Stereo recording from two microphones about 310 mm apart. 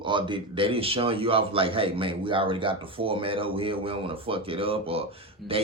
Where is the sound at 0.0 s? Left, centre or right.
Centre.